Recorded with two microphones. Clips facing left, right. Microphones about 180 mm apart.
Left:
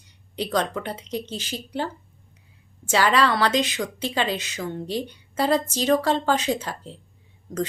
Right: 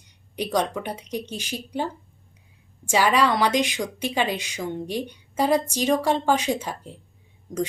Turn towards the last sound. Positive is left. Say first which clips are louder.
# even
turn(degrees=-20)  # may be behind; listen again after turning